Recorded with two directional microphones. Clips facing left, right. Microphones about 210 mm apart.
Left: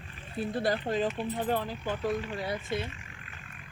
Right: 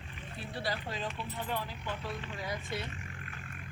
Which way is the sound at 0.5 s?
50° left (ahead or behind).